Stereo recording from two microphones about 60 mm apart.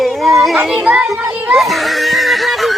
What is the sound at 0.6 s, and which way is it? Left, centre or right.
Music, right.